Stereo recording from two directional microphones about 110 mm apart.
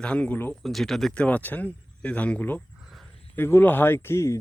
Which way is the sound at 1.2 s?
15° left (ahead or behind).